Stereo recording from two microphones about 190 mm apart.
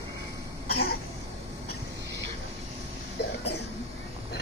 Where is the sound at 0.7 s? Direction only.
55° left (ahead or behind).